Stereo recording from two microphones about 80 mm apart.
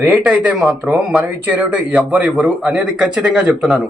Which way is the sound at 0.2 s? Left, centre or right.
Centre.